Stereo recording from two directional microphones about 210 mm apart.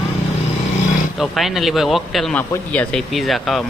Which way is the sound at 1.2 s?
Centre (ahead or behind).